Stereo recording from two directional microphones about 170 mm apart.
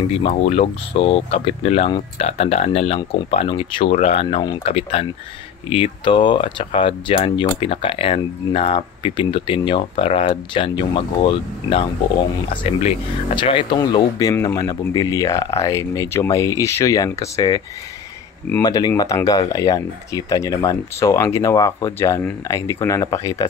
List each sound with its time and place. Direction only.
0.1 s speech: 35° left (ahead or behind)
13.4 s speech: 30° left (ahead or behind)
18.6 s speech: 20° left (ahead or behind)